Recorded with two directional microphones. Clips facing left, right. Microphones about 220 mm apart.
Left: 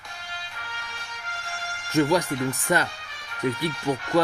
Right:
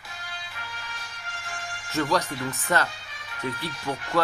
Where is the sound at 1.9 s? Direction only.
15° left (ahead or behind).